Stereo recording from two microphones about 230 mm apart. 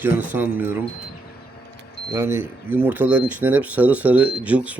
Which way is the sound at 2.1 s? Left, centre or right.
Centre.